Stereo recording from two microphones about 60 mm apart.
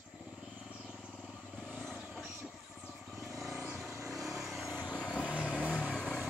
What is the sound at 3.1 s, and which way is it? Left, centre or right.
Vehicle, centre.